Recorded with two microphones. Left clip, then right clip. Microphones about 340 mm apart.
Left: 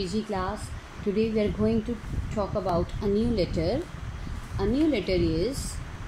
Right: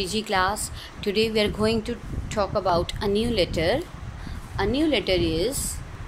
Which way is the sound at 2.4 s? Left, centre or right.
Right.